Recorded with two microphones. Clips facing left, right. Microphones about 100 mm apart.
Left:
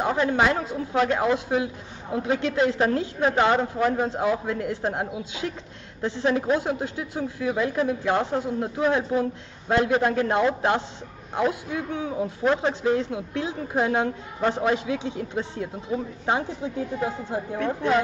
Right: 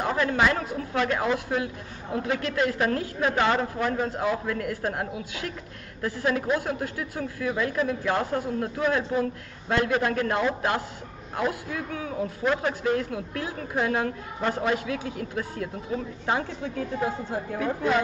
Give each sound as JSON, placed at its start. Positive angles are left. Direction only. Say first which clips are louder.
{"t": 0.0, "sound": "a woman's voice", "louder": "left 2 dB", "side_deg": 20}
{"t": 17.6, "sound": "a woman's voice", "louder": "left 2 dB", "side_deg": 0}